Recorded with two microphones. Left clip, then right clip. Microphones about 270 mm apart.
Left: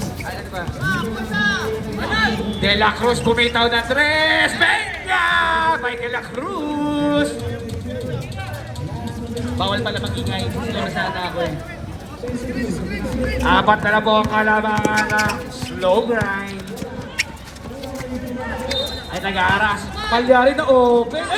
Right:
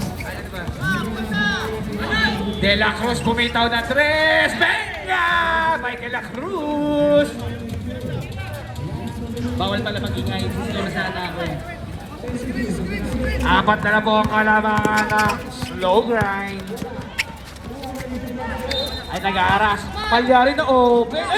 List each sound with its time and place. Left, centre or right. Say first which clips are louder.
0.9 s music: left 1 dB; centre
3.2 s a sound: left 1 dB; left
9.3 s a sound: left 2 dB; left
10.8 s speech: left 2 dB; centre
13.4 s speech: left 2 dB; centre
15.8 s a man's voice: even; right
19.2 s a man's voice: even; right